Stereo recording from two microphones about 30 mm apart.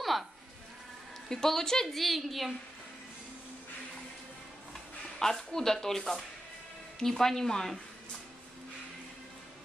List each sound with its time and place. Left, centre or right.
0.0 s sheep: centre
1.3 s a woman's voice: centre
1.9 s a woman's voice: centre
5.3 s speech: centre